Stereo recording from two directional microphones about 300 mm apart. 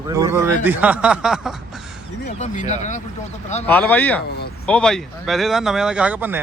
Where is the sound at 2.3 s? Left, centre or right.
Left.